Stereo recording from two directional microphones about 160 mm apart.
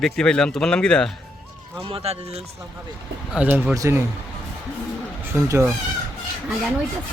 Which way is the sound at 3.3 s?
10° right (ahead or behind).